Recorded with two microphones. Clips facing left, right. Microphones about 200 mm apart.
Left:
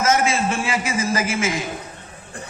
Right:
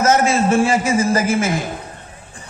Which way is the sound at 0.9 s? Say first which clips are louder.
Right 6 dB; 55° right (ahead or behind).